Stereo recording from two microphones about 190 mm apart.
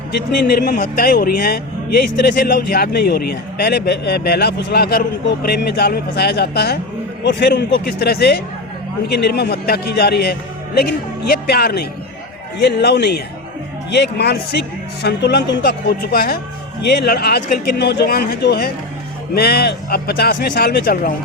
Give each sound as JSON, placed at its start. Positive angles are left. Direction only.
{"t": 0.5, "sound": "a man's voice", "side_deg": 60}